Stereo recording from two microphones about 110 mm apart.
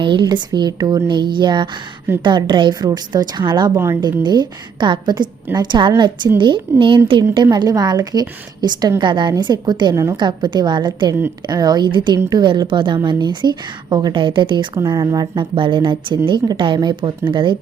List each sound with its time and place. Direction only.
0.0 s a woman's voice: 45° right (ahead or behind)
7.5 s a woman's voice: 35° right (ahead or behind)
9.9 s a woman's voice: 30° right (ahead or behind)
10.2 s speech: 45° right (ahead or behind)